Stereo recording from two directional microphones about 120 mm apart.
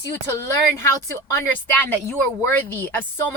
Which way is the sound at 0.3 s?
20° left (ahead or behind).